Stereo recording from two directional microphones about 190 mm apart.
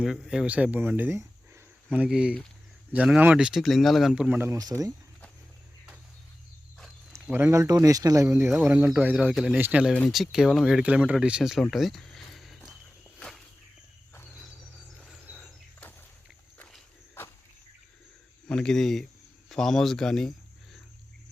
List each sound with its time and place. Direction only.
0.0 s speech: 5° right (ahead or behind); by 4.9 s 20° right (ahead or behind)
7.3 s speech: 10° right (ahead or behind)
9.9 s speech: centre (ahead or behind)
13.1 s walk: 5° left (ahead or behind)
15.0 s bird: centre (ahead or behind)
16.6 s walk: 10° left (ahead or behind)
18.4 s speech: 5° left (ahead or behind)